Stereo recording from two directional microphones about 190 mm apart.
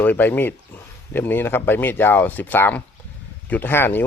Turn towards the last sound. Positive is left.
turn(degrees=10)  # may be behind; listen again after turning